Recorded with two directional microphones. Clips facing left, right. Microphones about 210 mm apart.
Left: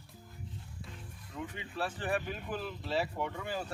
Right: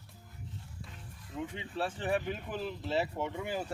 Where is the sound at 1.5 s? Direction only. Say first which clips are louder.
Even; 25° right (ahead or behind).